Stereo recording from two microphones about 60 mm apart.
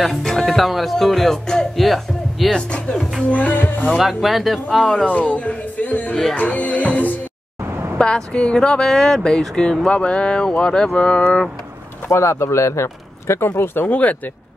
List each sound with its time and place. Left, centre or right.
0.0 s speech: centre
2.5 s speech: centre
3.3 s music: left
3.9 s speech: centre
5.1 s music: left
8.0 s a woman's voice: centre
12.1 s speech: left
13.6 s music: left